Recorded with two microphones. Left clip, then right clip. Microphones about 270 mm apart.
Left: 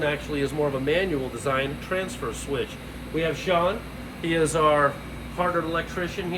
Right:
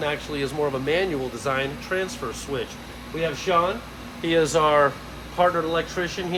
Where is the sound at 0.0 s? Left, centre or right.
Centre.